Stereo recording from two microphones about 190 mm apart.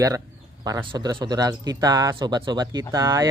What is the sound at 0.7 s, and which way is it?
Speech, 20° right (ahead or behind).